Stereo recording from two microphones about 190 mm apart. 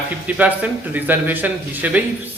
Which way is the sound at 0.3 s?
10° right (ahead or behind).